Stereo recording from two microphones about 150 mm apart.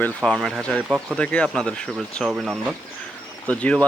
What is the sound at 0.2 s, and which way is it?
Speech, centre (ahead or behind).